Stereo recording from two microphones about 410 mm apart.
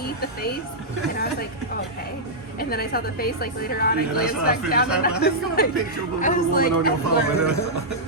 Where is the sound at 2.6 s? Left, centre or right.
Left.